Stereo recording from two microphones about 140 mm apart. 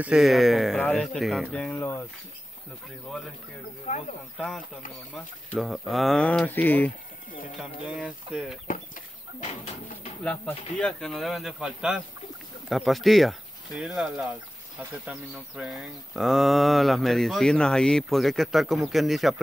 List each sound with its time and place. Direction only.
0.0 s speech: 5° right (ahead or behind); by 2.0 s 15° left (ahead or behind)
3.9 s speech: 70° left (ahead or behind)
4.4 s speech: centre (ahead or behind)
7.8 s speech: 5° right (ahead or behind)
10.2 s speech: 5° left (ahead or behind)
15.3 s speech: centre (ahead or behind)